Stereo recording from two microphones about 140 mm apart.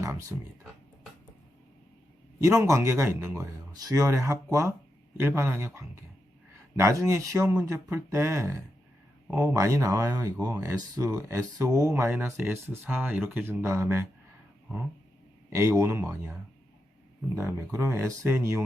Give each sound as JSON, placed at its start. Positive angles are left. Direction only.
{"t": 0.0, "sound": "speech", "side_deg": -20}
{"t": 2.6, "sound": "speech", "side_deg": -20}
{"t": 15.5, "sound": "speech", "side_deg": -20}